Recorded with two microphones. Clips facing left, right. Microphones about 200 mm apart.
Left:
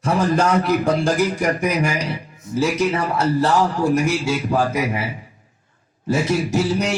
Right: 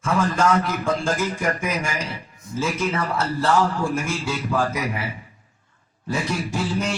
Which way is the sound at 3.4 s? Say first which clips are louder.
Right 1 dB; 40° left (ahead or behind).